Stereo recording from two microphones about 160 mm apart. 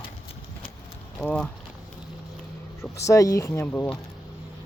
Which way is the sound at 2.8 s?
20° left (ahead or behind).